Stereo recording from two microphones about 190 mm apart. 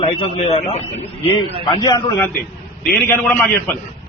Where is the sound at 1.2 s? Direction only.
25° left (ahead or behind).